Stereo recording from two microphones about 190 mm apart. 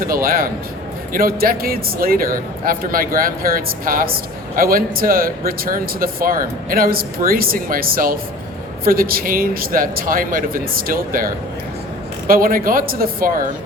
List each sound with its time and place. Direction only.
0.0 s speech: 50° right (ahead or behind)
12.3 s speech: 50° right (ahead or behind)